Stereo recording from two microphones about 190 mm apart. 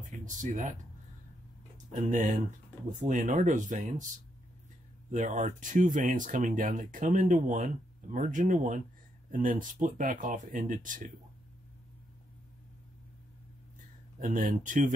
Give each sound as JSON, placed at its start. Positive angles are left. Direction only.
{"t": 0.2, "sound": "speech", "side_deg": -40}
{"t": 1.9, "sound": "speech", "side_deg": -40}
{"t": 5.1, "sound": "speech", "side_deg": -40}
{"t": 14.2, "sound": "speech", "side_deg": -45}